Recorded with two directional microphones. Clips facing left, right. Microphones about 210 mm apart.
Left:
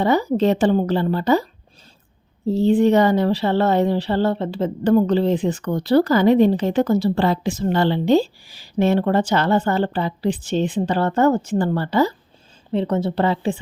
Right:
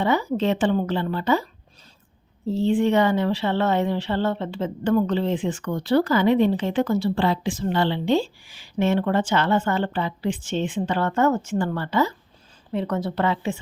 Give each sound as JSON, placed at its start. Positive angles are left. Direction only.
{"t": 0.0, "sound": "speech", "side_deg": 40}
{"t": 2.5, "sound": "a woman's voice", "side_deg": 40}